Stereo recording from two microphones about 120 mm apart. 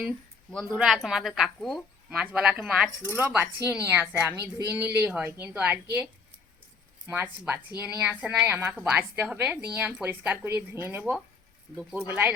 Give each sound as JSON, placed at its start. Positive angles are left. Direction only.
{"t": 0.5, "sound": "a woman's voice", "side_deg": -5}
{"t": 7.1, "sound": "a woman's voice", "side_deg": -20}